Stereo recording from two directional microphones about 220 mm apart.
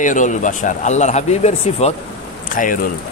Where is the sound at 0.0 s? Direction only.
35° left (ahead or behind).